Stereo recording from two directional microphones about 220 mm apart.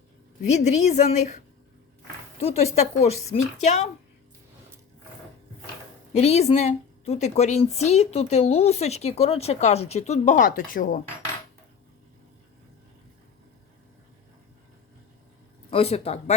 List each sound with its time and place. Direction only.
0.5 s a woman's voice: 30° left (ahead or behind)
2.4 s a woman's voice: 30° left (ahead or behind)
6.1 s a woman's voice: 30° left (ahead or behind)
15.7 s a woman's voice: 25° left (ahead or behind)